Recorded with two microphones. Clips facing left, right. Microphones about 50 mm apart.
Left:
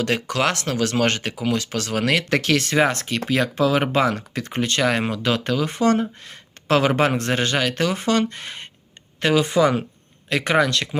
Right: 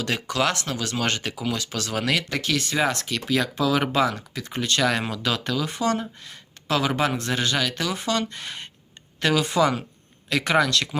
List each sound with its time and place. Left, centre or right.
0.0 s speech: left
2.3 s speech: left
2.7 s speech: left
4.1 s speech: left